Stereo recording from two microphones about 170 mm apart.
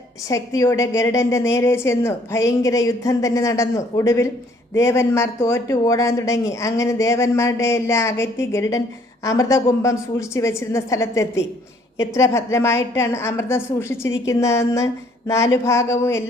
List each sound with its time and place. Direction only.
0.3 s speech: 20° left (ahead or behind)